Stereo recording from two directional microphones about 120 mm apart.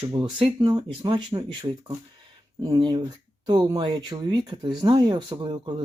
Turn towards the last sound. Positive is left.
turn(degrees=-40)  # may be behind; listen again after turning